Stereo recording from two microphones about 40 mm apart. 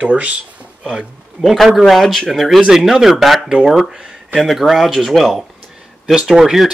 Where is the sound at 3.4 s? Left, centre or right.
Centre.